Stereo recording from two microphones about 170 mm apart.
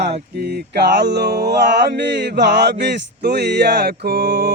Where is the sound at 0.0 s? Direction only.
75° right (ahead or behind).